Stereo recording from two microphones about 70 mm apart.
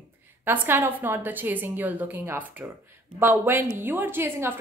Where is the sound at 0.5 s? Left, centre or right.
Right.